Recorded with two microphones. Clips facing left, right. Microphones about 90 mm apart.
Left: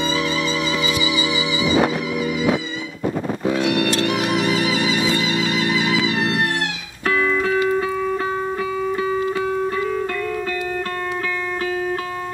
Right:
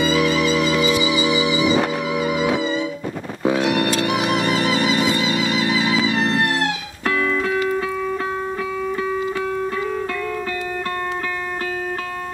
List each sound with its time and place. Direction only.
0.4 s music: 5° right (ahead or behind)
0.9 s music: 35° right (ahead or behind)
3.4 s music: 55° right (ahead or behind)
4.0 s music: 5° right (ahead or behind)
4.3 s music: 40° right (ahead or behind)
5.1 s music: 25° right (ahead or behind)
6.0 s music: centre (ahead or behind)
8.8 s music: 5° left (ahead or behind)